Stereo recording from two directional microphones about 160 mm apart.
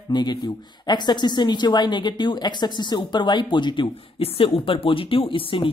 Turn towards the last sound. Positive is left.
turn(degrees=35)  # may be behind; listen again after turning